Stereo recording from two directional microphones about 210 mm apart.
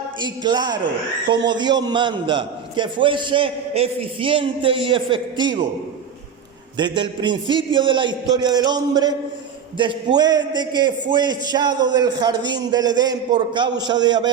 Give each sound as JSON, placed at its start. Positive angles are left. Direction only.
{"t": 0.2, "sound": "a man's voice", "side_deg": -20}
{"t": 6.7, "sound": "a man's voice", "side_deg": -20}